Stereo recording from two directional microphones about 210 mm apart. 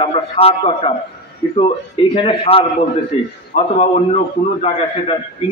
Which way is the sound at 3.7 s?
30° left (ahead or behind).